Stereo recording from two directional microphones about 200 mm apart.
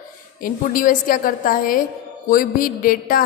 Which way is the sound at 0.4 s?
45° left (ahead or behind).